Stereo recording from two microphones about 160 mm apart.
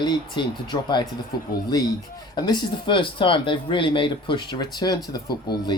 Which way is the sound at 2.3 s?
25° left (ahead or behind).